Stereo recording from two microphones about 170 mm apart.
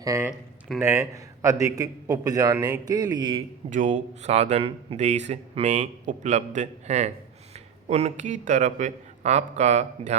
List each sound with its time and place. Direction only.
0.0 s a man's voice: 20° right (ahead or behind)
3.7 s a man's voice: 45° right (ahead or behind)